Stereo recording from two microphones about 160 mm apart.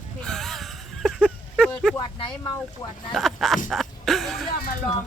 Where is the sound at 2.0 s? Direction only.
30° left (ahead or behind).